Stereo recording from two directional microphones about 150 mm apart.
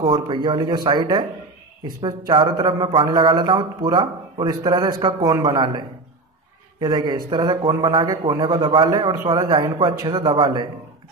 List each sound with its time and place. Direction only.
0.0 s a man's voice: 30° right (ahead or behind)